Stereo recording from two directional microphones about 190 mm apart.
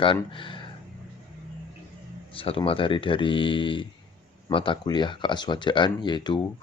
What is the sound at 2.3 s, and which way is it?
Speech, 30° left (ahead or behind).